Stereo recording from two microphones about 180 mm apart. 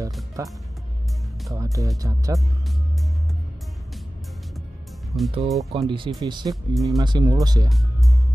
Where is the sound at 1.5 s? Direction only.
20° right (ahead or behind).